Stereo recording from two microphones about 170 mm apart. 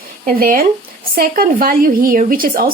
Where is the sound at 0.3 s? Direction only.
60° right (ahead or behind).